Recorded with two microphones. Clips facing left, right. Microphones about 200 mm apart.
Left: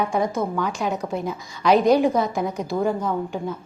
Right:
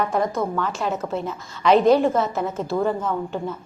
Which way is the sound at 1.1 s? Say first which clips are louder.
Even; 10° left (ahead or behind).